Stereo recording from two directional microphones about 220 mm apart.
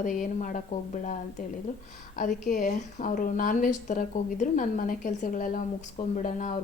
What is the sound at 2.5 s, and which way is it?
Speech, 35° left (ahead or behind).